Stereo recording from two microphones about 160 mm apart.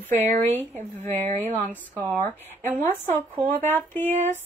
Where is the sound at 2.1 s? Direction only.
10° left (ahead or behind).